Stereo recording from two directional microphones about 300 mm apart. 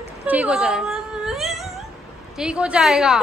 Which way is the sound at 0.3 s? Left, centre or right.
Centre.